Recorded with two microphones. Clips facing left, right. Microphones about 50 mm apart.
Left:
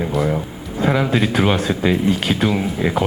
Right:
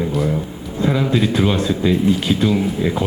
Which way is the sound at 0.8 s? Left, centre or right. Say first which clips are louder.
Even; left.